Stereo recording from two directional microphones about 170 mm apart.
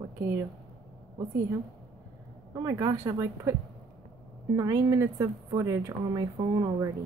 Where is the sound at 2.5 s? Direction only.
20° right (ahead or behind).